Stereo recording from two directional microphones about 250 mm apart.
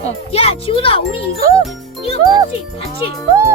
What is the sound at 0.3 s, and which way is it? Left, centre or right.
Speech, left.